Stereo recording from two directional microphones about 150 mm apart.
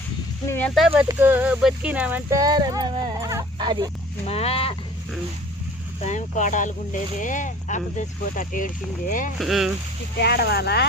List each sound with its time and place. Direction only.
0.4 s speech: 15° left (ahead or behind)
1.0 s speech: 15° right (ahead or behind)
2.4 s speech: 25° right (ahead or behind)
4.3 s speech: 40° left (ahead or behind)
6.0 s speech: 55° left (ahead or behind)
9.4 s speech: centre (ahead or behind)
10.2 s speech: 90° left